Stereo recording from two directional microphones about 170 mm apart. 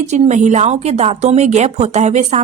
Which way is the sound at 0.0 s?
45° right (ahead or behind).